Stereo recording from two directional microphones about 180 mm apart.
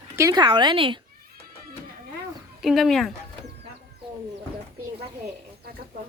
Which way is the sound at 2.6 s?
Centre (ahead or behind).